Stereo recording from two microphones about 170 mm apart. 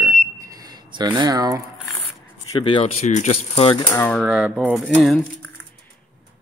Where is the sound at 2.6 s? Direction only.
30° left (ahead or behind).